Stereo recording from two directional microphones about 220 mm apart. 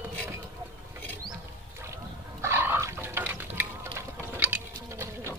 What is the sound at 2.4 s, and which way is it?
Pig, 10° right (ahead or behind).